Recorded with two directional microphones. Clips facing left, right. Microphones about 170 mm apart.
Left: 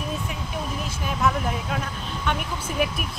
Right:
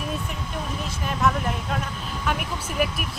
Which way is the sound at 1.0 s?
Centre (ahead or behind).